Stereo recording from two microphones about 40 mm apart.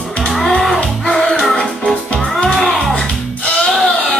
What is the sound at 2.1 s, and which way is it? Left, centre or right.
Music, centre.